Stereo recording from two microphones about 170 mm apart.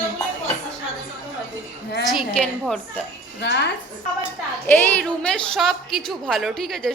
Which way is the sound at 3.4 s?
90° left.